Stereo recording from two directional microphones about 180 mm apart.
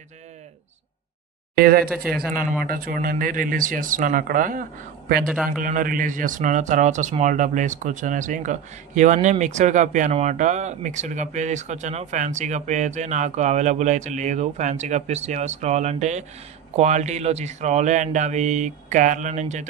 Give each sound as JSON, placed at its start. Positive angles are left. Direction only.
{"t": 1.6, "sound": "speech", "side_deg": -55}